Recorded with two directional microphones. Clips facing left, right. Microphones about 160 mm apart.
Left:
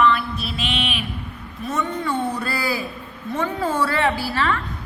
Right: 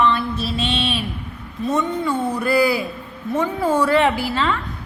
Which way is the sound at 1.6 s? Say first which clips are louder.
Right 4 dB; 20° right (ahead or behind).